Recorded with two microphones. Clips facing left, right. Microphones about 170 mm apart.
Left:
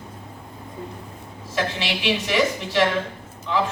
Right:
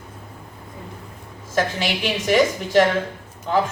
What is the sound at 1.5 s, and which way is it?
A man's voice, 45° right (ahead or behind).